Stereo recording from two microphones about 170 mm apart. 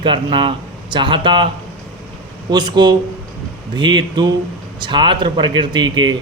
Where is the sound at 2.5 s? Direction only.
25° right (ahead or behind).